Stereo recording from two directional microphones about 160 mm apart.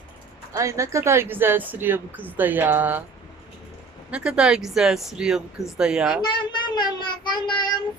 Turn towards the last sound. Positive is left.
turn(degrees=30)  # may be behind; listen again after turning